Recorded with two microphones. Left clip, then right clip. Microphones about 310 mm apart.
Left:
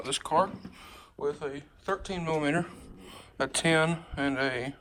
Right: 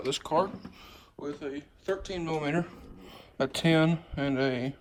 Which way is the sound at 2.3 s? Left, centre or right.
Centre.